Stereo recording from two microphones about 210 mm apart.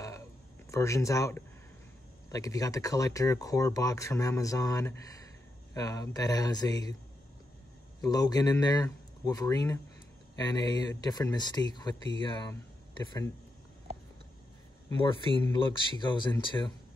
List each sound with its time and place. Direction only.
0.7 s speech: 15° left (ahead or behind)
8.1 s speech: 20° left (ahead or behind)
15.4 s speech: 20° left (ahead or behind)